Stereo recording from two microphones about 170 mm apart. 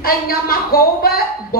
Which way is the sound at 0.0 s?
60° left (ahead or behind).